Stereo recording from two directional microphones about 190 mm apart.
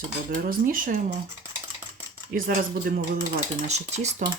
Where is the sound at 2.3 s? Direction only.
50° right (ahead or behind).